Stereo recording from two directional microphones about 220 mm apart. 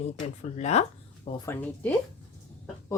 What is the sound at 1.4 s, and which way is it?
Speech, 10° left (ahead or behind).